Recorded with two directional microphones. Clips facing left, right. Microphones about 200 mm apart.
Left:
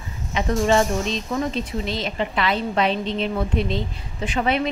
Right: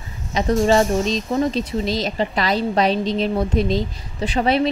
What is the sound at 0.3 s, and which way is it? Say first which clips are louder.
Speech: right 3 dB; 35° right (ahead or behind).